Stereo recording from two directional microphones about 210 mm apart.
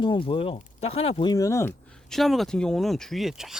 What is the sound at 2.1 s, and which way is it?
Speech, centre (ahead or behind).